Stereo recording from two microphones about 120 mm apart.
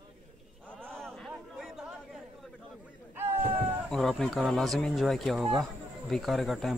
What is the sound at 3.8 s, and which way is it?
Speech, 5° left (ahead or behind).